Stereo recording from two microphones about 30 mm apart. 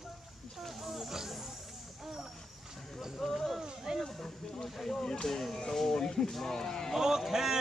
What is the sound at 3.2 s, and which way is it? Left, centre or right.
Speech, centre.